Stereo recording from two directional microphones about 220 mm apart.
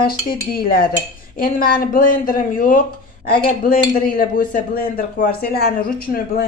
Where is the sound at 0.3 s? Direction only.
40° left (ahead or behind).